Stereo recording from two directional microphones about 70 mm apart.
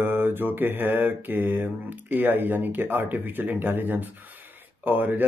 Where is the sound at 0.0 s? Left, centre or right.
Right.